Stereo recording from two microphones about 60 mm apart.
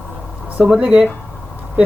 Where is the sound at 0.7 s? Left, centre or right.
Right.